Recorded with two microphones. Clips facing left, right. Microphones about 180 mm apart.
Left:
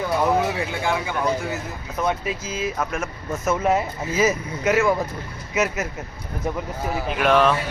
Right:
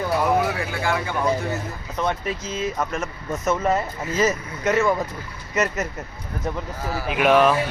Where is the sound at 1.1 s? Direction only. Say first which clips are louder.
Right 1 dB; centre (ahead or behind).